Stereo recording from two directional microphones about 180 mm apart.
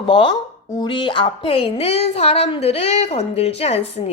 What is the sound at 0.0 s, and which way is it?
A woman's voice, 30° left (ahead or behind).